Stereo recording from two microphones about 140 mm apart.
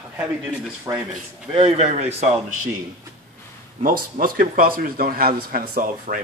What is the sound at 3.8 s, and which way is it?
A man's voice, 90° right.